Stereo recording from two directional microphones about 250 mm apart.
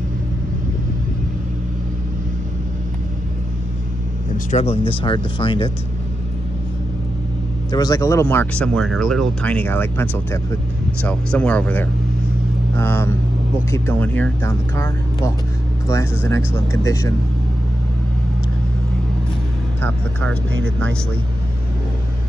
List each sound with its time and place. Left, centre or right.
4.5 s speech: left
7.7 s speech: centre
19.8 s speech: centre